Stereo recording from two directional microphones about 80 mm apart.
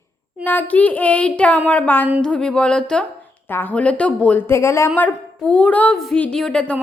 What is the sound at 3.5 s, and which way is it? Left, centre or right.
Speech, left.